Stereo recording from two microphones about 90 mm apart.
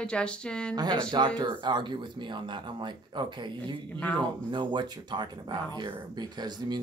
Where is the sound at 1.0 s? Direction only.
50° right (ahead or behind).